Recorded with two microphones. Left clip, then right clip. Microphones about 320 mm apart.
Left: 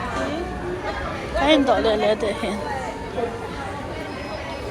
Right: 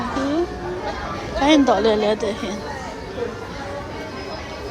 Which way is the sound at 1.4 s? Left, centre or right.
Centre.